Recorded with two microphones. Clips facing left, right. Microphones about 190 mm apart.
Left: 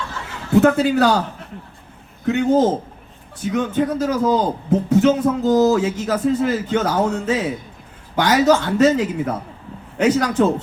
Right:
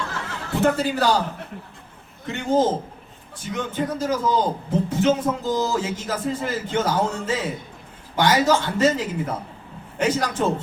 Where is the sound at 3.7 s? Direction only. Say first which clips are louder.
Left 2 dB; 65° left (ahead or behind).